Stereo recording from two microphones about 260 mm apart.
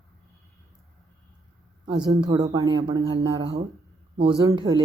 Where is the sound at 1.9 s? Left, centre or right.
Centre.